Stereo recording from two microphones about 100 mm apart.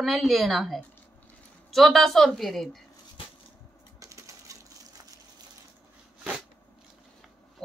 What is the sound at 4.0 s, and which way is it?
Coin, 30° right (ahead or behind).